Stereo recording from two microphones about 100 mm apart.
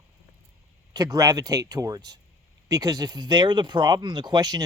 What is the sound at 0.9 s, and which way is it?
Speech, 40° right (ahead or behind).